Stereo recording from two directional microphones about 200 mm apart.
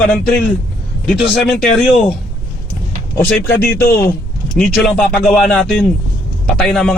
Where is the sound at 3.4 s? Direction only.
55° left (ahead or behind).